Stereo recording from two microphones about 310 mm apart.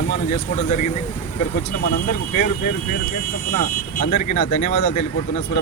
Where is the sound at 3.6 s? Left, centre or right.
Left.